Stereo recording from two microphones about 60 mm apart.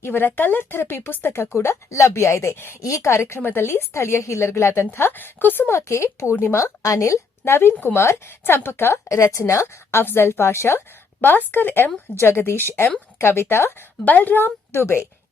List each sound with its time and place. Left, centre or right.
0.0 s a woman's voice: left
0.8 s a woman's voice: left
5.7 s a woman's voice: left
9.3 s a woman's voice: left
10.0 s a woman's voice: left
14.0 s a woman's voice: left